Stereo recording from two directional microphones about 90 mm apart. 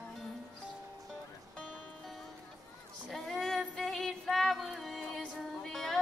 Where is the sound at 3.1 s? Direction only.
5° left (ahead or behind).